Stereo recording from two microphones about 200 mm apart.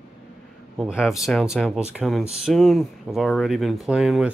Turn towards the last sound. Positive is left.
turn(degrees=-5)  # may be behind; listen again after turning